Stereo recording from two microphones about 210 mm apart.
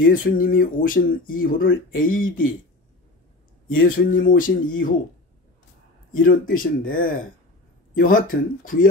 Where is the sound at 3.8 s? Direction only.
40° left (ahead or behind).